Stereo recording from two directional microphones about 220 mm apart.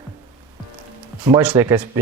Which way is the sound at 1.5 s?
15° right (ahead or behind).